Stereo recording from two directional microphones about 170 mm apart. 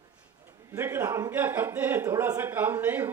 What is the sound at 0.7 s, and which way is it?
A man's voice, 15° right (ahead or behind).